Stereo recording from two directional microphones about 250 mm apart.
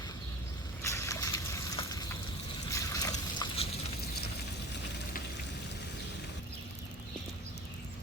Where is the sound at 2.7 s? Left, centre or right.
Centre.